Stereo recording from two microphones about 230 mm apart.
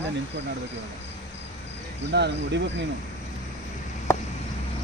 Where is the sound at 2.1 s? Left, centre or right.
Right.